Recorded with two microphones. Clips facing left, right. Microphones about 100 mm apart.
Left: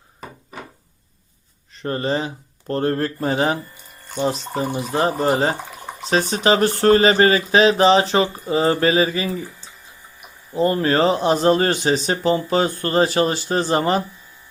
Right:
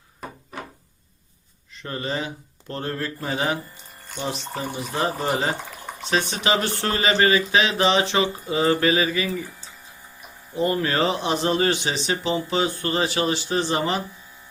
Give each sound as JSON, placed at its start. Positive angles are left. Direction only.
{"t": 1.7, "sound": "speech", "side_deg": 40}
{"t": 4.1, "sound": "speech", "side_deg": 45}
{"t": 10.5, "sound": "speech", "side_deg": 35}